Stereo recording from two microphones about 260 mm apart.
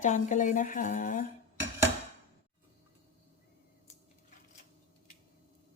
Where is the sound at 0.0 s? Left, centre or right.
Left.